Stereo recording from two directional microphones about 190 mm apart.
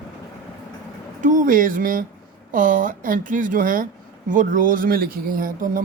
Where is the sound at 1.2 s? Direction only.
45° right (ahead or behind).